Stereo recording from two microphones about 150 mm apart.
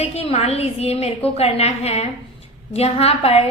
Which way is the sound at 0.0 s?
40° left (ahead or behind).